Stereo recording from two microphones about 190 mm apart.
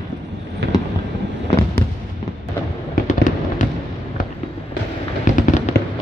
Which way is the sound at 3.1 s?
40° left (ahead or behind).